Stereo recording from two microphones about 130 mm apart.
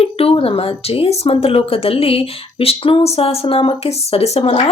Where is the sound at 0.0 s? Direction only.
50° left (ahead or behind).